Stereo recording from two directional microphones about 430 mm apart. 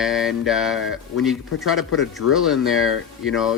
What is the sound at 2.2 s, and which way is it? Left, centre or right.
Speech, left.